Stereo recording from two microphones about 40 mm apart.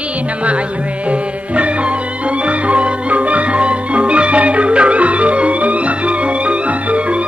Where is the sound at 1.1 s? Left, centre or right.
Right.